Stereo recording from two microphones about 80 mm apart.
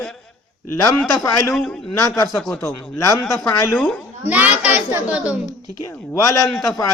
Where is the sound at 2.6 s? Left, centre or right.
Left.